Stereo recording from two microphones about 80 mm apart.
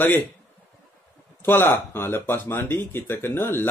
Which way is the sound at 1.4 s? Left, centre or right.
Left.